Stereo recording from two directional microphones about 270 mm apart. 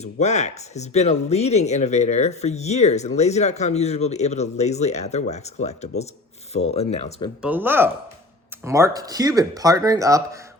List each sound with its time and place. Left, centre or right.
0.0 s speech: left
7.4 s speech: centre